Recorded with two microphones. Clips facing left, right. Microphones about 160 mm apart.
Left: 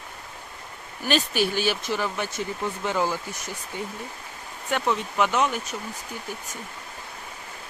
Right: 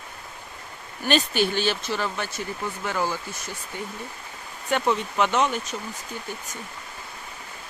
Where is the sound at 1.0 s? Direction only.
5° left (ahead or behind).